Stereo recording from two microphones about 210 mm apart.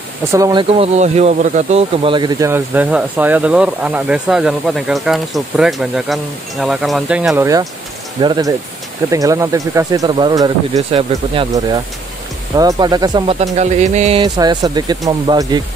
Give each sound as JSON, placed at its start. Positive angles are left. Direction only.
{"t": 0.3, "sound": "speech", "side_deg": -20}
{"t": 13.4, "sound": "speech", "side_deg": -35}